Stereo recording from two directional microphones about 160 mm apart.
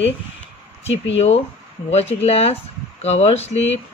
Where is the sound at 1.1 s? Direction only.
40° left (ahead or behind).